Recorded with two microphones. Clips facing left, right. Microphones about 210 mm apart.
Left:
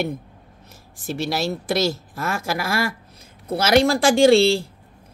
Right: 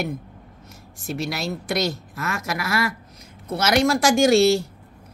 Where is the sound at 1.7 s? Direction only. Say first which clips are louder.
Left 2 dB; 30° left (ahead or behind).